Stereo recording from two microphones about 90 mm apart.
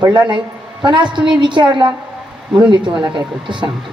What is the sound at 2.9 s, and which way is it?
Speech, 15° right (ahead or behind).